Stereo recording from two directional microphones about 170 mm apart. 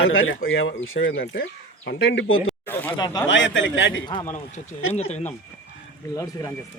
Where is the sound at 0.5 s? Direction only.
90° left.